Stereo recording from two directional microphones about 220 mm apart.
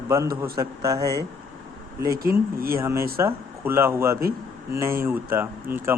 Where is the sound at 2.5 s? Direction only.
40° right (ahead or behind).